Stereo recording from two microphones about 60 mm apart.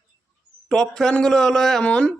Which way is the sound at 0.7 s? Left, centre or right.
Centre.